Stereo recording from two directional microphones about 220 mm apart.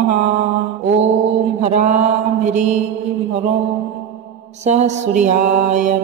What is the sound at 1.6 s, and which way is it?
Mantra, 35° right (ahead or behind).